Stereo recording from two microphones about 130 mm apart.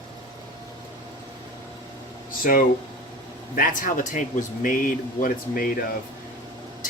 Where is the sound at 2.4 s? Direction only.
90° left.